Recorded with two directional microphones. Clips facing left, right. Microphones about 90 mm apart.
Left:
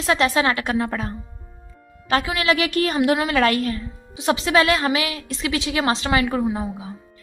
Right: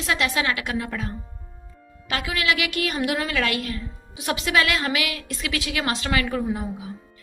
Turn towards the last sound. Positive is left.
turn(degrees=25)  # may be behind; listen again after turning